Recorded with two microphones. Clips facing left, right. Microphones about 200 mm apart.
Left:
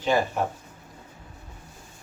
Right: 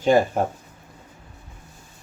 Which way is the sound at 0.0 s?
45° right (ahead or behind).